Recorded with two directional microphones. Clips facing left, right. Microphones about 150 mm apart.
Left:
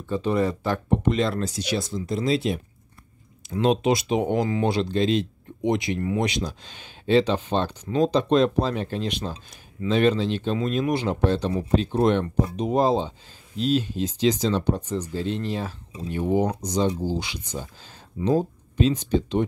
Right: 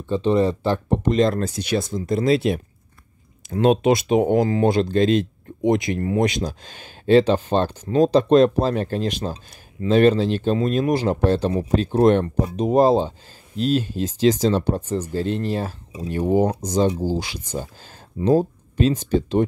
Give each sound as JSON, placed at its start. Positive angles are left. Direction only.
{"t": 0.0, "sound": "speech", "side_deg": -25}
{"t": 3.4, "sound": "speech", "side_deg": -50}